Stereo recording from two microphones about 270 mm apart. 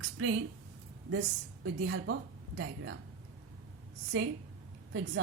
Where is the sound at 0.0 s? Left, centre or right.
Right.